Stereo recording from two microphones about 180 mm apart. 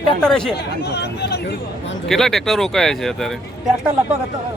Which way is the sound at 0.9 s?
65° left (ahead or behind).